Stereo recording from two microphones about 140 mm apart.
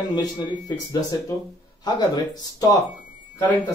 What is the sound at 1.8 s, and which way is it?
Speech, 30° left (ahead or behind).